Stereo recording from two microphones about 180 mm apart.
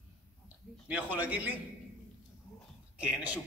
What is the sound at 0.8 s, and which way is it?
Speech, 10° right (ahead or behind).